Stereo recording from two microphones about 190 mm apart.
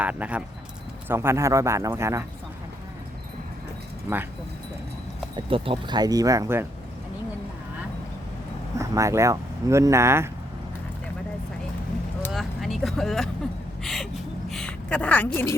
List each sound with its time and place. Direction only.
0.0 s speech: 10° right (ahead or behind)
5.5 s speech: 30° right (ahead or behind)
8.8 s speech: 15° right (ahead or behind)
12.3 s vehicle: centre (ahead or behind)
13.8 s gasp: centre (ahead or behind)
14.5 s a woman's voice: 5° left (ahead or behind)